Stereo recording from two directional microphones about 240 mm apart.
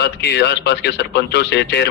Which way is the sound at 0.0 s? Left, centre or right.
Left.